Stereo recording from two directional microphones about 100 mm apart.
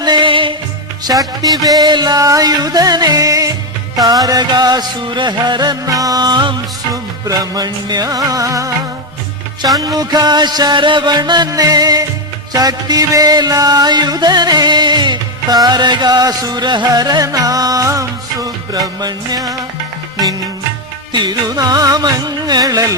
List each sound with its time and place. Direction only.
0.0 s music: 50° right (ahead or behind)
1.1 s music: 30° right (ahead or behind); by 6.6 s 50° right (ahead or behind)
6.9 s music: 40° right (ahead or behind)
9.7 s music: 40° right (ahead or behind)
21.1 s music: 45° right (ahead or behind)